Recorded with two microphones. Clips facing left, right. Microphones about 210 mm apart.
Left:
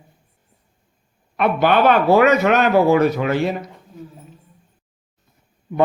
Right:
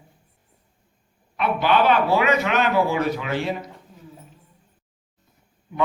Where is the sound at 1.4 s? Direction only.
55° left (ahead or behind).